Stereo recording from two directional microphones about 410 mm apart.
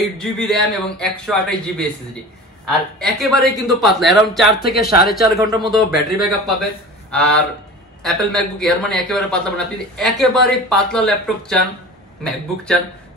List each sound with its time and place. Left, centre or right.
0.2 s a man's voice: centre
4.7 s speech: left
5.4 s a man's voice: centre